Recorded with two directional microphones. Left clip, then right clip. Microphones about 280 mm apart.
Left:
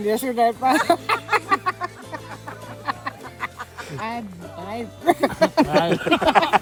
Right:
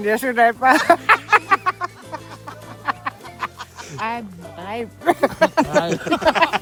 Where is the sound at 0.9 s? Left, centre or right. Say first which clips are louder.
Right 6 dB; right.